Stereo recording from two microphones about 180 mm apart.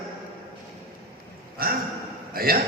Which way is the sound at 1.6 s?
55° right (ahead or behind).